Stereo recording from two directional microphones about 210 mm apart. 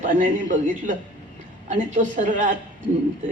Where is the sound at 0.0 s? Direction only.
40° right (ahead or behind).